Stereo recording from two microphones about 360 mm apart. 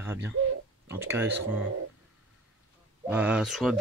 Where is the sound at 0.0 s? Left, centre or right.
Centre.